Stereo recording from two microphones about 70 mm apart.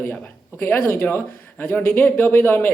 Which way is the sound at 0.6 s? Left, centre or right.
Left.